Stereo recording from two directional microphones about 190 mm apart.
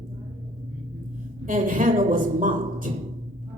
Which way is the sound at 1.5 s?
45° right (ahead or behind).